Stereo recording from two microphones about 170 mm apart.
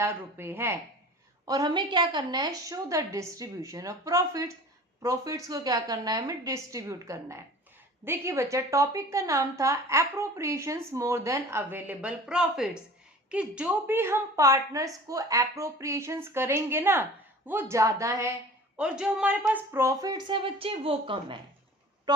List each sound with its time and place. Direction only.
0.0 s a woman's voice: 15° right (ahead or behind)
18.8 s a woman's voice: 5° right (ahead or behind); by 21.3 s 35° right (ahead or behind)